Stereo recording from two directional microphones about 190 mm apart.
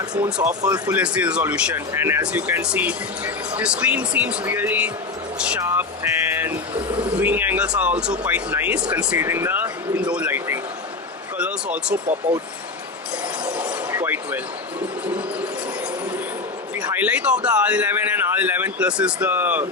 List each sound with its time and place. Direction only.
0.1 s speech: 5° right (ahead or behind)
0.6 s speech: 20° right (ahead or behind)
0.9 s speech: 5° right (ahead or behind)
6.3 s vehicle: 10° right (ahead or behind)
6.7 s speech: 25° right (ahead or behind)
7.2 s speech: 10° right (ahead or behind)
11.3 s a sound: 5° right (ahead or behind)
12.3 s speech: 5° right (ahead or behind)
13.4 s a sound: 10° right (ahead or behind)
15.0 s train: 5° right (ahead or behind)
16.8 s speech: 10° right (ahead or behind)